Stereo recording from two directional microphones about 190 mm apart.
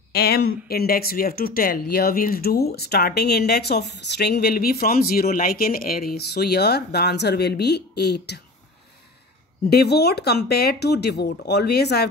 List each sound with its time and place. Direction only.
0.1 s speech: 55° left (ahead or behind)
9.7 s speech: 60° left (ahead or behind)